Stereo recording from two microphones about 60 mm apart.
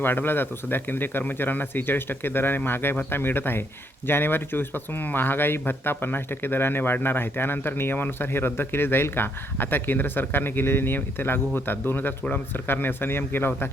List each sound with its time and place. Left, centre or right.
0.0 s speech: left